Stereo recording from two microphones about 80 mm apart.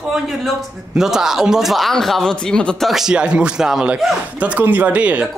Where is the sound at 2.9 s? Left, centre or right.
Centre.